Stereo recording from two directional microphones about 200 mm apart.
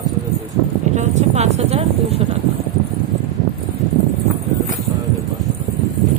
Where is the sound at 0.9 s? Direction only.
35° right (ahead or behind).